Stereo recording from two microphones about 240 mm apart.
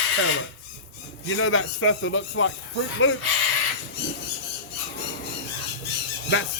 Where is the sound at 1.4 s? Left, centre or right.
Left.